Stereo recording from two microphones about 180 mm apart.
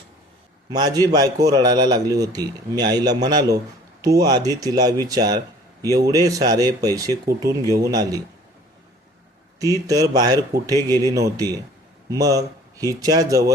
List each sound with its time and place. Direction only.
0.7 s a man's voice: 20° right (ahead or behind)
9.6 s a man's voice: 20° right (ahead or behind)